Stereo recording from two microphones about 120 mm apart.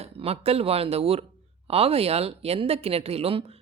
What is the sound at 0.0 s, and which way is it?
Speech, 55° right (ahead or behind).